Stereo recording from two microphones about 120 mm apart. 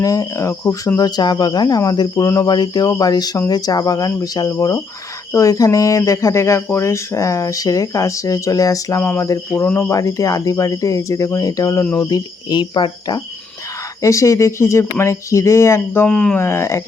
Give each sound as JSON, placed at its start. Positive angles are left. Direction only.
{"t": 0.0, "sound": "speech", "side_deg": 30}
{"t": 2.5, "sound": "speech", "side_deg": 35}
{"t": 9.5, "sound": "speech", "side_deg": 15}
{"t": 14.0, "sound": "speech", "side_deg": 25}
{"t": 16.0, "sound": "speech", "side_deg": 5}
{"t": 16.4, "sound": "speech", "side_deg": 20}